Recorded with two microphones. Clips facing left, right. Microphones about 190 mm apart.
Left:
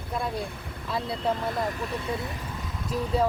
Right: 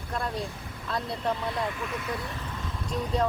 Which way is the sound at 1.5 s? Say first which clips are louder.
Left 2 dB; 40° left (ahead or behind).